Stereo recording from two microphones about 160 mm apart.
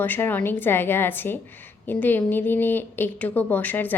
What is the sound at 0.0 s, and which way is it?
A woman's voice, 10° left (ahead or behind).